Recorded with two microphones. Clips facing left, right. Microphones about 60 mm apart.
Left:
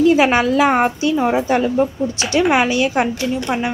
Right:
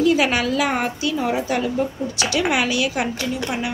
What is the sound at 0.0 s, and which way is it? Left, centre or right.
Speech, left.